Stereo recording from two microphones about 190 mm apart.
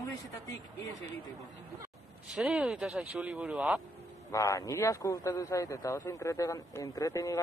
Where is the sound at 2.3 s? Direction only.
5° right (ahead or behind).